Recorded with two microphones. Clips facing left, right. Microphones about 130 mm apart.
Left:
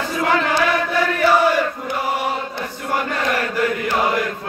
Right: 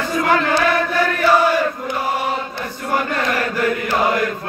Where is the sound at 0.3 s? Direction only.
15° left (ahead or behind).